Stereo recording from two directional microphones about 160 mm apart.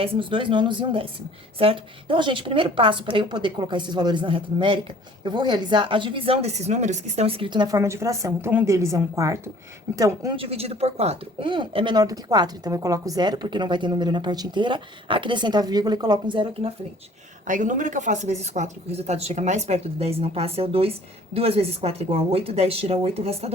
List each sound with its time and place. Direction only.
0.0 s a woman's voice: 35° right (ahead or behind)
7.8 s speech: 15° right (ahead or behind)
10.3 s speech: 35° right (ahead or behind)
17.4 s a woman's voice: 55° right (ahead or behind)